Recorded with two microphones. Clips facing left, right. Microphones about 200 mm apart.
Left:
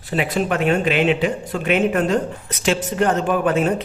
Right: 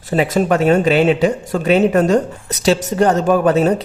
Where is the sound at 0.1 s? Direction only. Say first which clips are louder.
Right 6 dB; 40° right (ahead or behind).